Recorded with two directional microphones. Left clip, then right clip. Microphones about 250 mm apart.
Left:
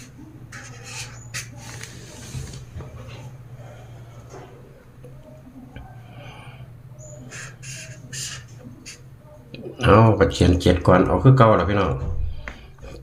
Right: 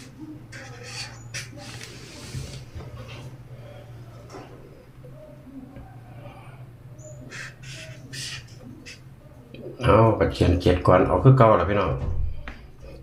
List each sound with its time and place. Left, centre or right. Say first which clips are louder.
9.5 s speech: left 3 dB; left